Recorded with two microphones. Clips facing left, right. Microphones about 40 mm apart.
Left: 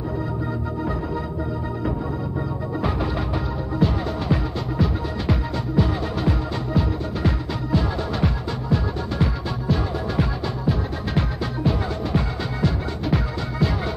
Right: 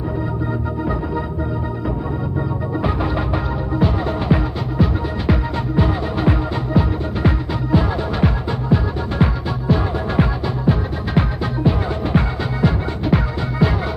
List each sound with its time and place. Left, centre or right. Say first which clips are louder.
2.8 s music: right 3 dB; centre